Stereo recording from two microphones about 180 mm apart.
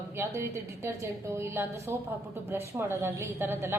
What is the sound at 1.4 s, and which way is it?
A woman's voice, 15° right (ahead or behind).